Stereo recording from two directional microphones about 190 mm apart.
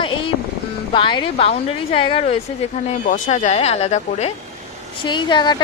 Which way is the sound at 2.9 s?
40° left (ahead or behind).